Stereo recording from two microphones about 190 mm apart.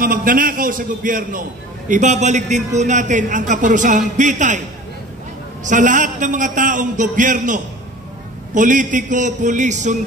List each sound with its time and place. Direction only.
0.0 s a man's voice: 50° right (ahead or behind)
5.6 s a man's voice: 40° right (ahead or behind)